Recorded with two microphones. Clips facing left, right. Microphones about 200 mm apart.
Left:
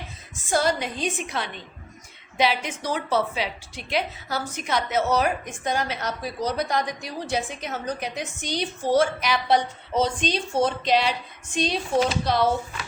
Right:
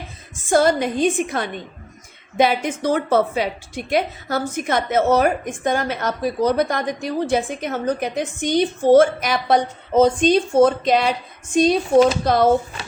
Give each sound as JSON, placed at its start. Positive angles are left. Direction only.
{"t": 0.5, "sound": "a woman's voice", "side_deg": -50}